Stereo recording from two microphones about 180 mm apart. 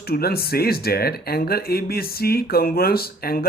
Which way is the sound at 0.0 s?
60° left (ahead or behind).